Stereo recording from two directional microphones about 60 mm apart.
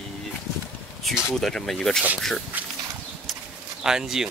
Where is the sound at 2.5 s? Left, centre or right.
Right.